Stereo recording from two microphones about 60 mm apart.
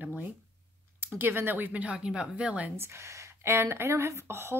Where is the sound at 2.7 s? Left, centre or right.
Right.